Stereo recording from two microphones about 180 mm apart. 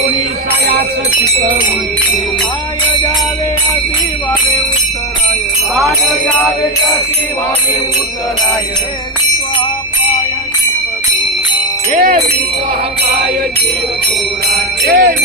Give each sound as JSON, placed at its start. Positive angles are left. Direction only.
{"t": 11.9, "sound": "speech", "side_deg": -50}
{"t": 14.5, "sound": "jingle bell", "side_deg": -60}